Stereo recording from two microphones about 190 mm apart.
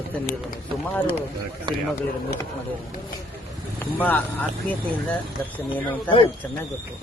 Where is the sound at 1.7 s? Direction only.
25° right (ahead or behind).